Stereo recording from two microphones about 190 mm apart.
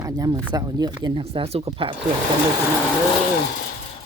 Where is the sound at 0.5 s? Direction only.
20° right (ahead or behind).